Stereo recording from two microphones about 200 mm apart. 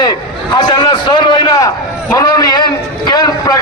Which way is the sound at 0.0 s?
20° left (ahead or behind).